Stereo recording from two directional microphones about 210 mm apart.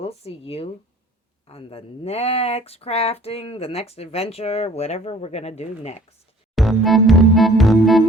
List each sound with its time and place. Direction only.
0.0 s speech: 30° left (ahead or behind)
6.6 s music: centre (ahead or behind)